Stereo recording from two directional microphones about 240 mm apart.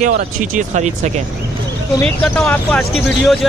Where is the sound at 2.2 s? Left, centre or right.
Centre.